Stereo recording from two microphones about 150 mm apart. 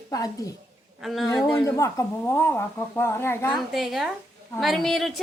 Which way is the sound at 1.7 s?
20° left (ahead or behind).